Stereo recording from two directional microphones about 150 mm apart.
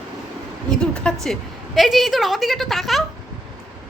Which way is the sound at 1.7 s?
Centre (ahead or behind).